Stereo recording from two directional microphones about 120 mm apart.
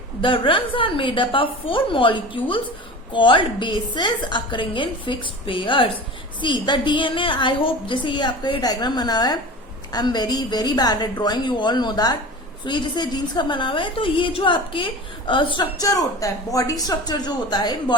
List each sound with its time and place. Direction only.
0.2 s a woman's voice: 45° left (ahead or behind)
15.8 s a woman's voice: 30° left (ahead or behind)